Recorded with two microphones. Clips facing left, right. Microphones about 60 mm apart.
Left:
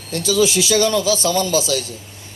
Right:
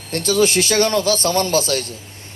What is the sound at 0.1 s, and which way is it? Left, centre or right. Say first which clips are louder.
Speech: right 1 dB; right.